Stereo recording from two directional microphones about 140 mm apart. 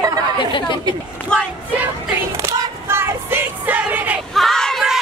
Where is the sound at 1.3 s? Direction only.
5° left (ahead or behind).